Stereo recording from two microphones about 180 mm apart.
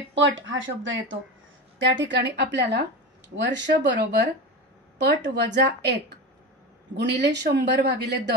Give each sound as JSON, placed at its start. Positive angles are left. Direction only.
{"t": 0.1, "sound": "speech", "side_deg": -90}